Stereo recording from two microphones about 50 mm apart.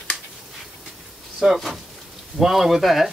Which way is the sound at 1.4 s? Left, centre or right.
Centre.